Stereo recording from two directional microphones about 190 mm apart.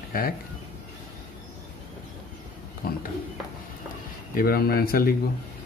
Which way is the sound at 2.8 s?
50° left (ahead or behind).